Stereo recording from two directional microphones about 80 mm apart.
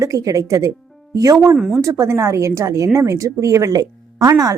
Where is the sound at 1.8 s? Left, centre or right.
Right.